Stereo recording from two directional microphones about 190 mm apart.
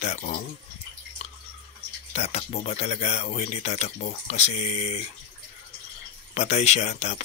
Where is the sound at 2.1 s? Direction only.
35° left (ahead or behind).